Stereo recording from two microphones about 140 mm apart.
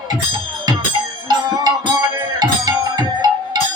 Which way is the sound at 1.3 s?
30° right (ahead or behind).